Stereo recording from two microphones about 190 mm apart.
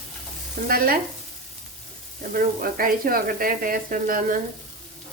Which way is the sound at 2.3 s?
50° right (ahead or behind).